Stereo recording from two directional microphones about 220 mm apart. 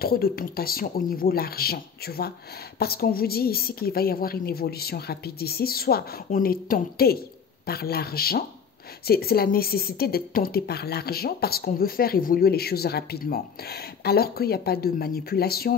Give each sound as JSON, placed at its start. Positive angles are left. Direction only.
{"t": 0.0, "sound": "a woman's voice", "side_deg": 45}